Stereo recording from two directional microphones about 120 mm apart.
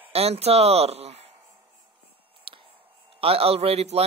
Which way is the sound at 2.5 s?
50° right (ahead or behind).